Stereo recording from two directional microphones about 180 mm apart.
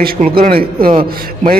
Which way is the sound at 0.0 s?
55° right (ahead or behind).